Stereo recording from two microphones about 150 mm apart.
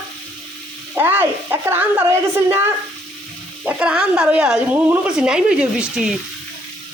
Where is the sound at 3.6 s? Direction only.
5° right (ahead or behind).